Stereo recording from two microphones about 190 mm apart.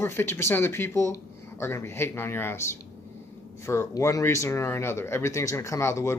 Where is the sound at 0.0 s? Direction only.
15° left (ahead or behind).